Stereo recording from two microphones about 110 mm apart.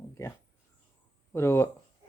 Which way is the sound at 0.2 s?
30° left (ahead or behind).